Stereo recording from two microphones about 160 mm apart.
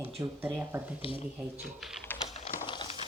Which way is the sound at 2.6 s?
30° left (ahead or behind).